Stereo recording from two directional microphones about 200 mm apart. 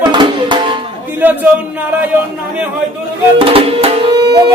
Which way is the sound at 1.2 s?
10° right (ahead or behind).